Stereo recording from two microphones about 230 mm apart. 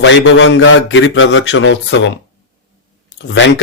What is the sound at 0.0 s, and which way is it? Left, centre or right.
Speech, left.